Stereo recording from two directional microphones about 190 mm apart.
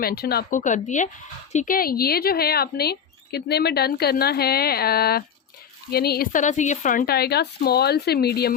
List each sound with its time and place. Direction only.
0.0 s a woman's voice: 55° left (ahead or behind)